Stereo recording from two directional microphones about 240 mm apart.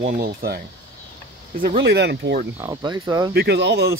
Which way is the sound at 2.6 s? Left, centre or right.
Centre.